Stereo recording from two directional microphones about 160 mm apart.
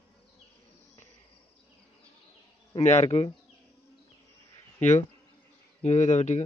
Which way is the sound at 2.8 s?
45° left (ahead or behind).